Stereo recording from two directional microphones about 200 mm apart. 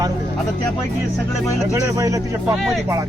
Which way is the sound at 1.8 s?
15° right (ahead or behind).